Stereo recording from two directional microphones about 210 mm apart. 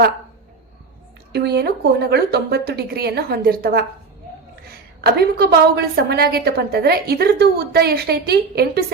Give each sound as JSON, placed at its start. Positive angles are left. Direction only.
{"t": 1.3, "sound": "a woman's voice", "side_deg": -50}